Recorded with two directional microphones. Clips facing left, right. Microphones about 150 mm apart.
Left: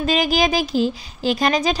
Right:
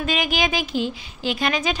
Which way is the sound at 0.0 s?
35° left (ahead or behind).